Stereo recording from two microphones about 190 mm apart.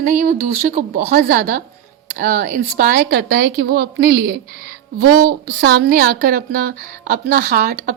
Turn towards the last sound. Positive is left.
turn(degrees=-50)  # may be behind; listen again after turning